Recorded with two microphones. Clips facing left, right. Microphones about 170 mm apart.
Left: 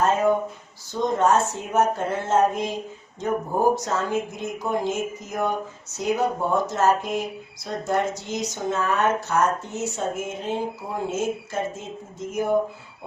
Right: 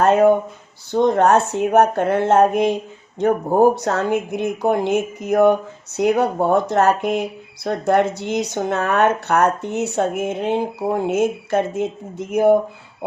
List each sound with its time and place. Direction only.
0.0 s speech: 65° right (ahead or behind)